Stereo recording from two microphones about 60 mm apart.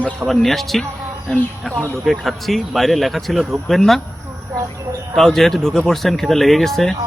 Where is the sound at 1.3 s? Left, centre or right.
Centre.